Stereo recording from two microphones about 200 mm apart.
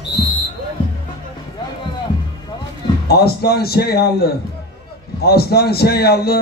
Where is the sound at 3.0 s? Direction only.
50° left (ahead or behind).